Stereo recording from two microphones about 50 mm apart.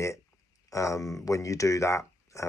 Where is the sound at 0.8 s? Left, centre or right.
Left.